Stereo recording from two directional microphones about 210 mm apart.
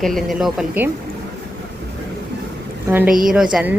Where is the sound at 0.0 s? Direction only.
Centre (ahead or behind).